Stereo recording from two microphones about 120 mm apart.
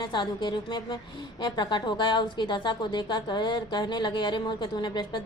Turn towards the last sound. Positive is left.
turn(degrees=35)  # may be behind; listen again after turning